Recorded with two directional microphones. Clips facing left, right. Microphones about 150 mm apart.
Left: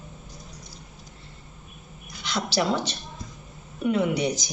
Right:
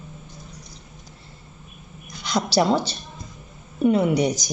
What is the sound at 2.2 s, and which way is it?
A woman's voice, 40° right (ahead or behind).